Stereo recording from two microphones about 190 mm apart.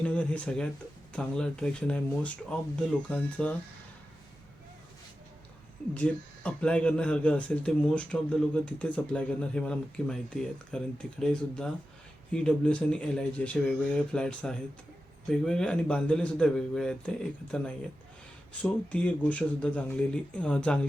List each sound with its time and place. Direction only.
0.0 s speech: 5° left (ahead or behind)
5.9 s speech: 5° left (ahead or behind)